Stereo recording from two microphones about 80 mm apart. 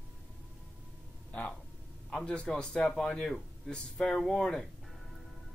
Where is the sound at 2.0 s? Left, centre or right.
Centre.